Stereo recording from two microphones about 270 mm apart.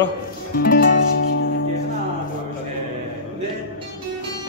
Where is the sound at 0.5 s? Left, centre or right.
Left.